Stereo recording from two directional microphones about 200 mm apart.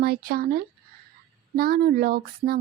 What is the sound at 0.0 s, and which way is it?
Speech, 50° right (ahead or behind).